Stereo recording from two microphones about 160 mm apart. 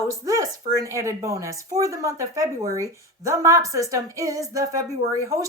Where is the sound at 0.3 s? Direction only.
20° right (ahead or behind).